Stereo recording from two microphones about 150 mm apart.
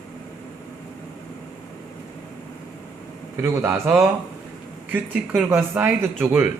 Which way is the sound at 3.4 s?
15° right (ahead or behind).